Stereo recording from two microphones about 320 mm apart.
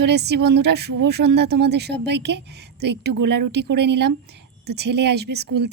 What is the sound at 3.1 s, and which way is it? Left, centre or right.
Speech, right.